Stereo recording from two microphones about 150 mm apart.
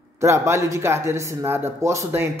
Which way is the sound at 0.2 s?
20° right (ahead or behind).